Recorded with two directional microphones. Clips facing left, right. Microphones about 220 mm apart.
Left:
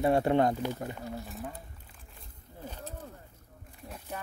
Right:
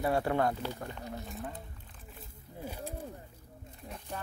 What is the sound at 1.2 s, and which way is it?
Speech, centre (ahead or behind).